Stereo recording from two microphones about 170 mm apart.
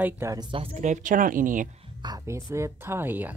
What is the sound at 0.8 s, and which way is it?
Speech, 50° right (ahead or behind).